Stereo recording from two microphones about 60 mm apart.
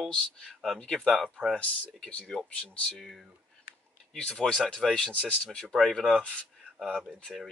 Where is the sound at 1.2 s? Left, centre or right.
Centre.